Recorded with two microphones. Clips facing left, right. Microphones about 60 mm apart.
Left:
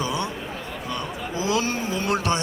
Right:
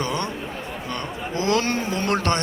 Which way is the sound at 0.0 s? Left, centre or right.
Right.